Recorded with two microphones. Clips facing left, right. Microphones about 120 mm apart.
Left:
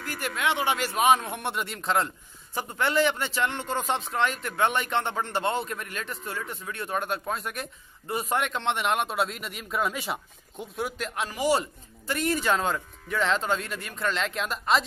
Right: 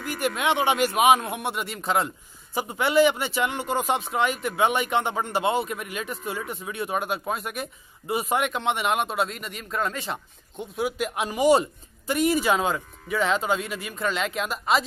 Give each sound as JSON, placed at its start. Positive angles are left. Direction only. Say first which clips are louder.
{"t": 0.0, "sound": "a man's voice", "louder": "right 4 dB", "side_deg": -15}